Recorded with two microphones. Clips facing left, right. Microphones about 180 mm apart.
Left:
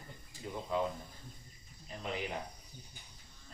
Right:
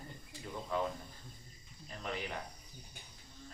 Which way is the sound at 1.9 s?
20° left (ahead or behind).